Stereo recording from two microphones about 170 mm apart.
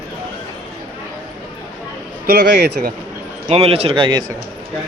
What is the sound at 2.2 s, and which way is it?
Speech, 70° right (ahead or behind).